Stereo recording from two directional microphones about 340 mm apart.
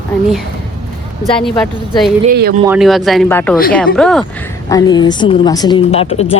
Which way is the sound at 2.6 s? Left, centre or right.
Centre.